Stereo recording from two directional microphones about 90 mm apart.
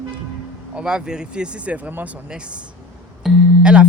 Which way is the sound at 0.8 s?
10° right (ahead or behind).